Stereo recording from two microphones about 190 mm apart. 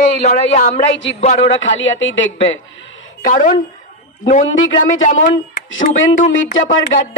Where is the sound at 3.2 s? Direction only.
45° left (ahead or behind).